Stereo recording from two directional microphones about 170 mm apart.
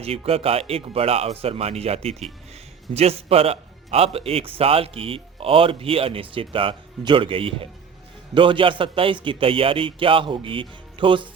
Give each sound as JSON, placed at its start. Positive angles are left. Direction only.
{"t": 0.0, "sound": "speech", "side_deg": -35}